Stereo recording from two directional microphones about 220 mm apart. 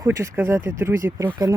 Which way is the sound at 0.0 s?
15° right (ahead or behind).